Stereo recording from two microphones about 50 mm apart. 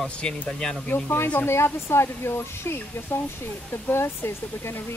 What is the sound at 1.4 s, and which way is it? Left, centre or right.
Speech, left.